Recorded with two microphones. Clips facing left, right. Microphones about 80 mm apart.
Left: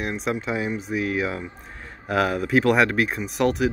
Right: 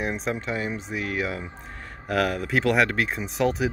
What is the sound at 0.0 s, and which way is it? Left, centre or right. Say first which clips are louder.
Speech: left 1 dB; centre.